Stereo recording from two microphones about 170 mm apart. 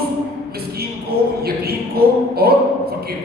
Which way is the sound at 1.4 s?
65° right (ahead or behind).